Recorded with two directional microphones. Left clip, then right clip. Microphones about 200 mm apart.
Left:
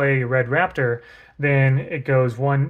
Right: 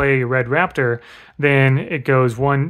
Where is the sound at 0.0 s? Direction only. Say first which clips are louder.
Right 3 dB; 30° right (ahead or behind).